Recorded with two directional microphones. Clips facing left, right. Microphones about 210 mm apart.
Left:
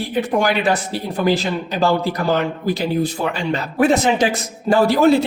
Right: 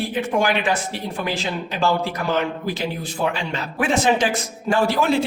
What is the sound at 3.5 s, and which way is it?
Speech, 40° left (ahead or behind).